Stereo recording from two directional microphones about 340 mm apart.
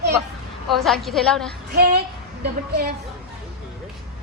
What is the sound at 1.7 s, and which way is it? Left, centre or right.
Speech, right.